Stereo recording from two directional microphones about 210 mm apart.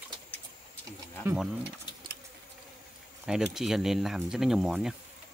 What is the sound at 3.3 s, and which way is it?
Speech, centre (ahead or behind).